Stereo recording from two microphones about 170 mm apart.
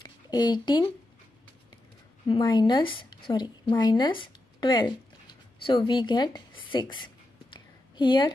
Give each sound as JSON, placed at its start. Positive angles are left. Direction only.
{"t": 0.0, "sound": "speech", "side_deg": 25}
{"t": 2.2, "sound": "a woman's voice", "side_deg": 30}
{"t": 7.5, "sound": "a sound", "side_deg": 25}